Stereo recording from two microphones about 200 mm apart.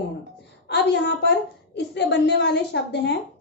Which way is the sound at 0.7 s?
60° left (ahead or behind).